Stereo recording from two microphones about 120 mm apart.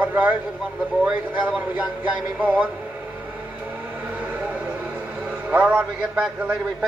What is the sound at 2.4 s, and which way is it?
Speech, 15° right (ahead or behind).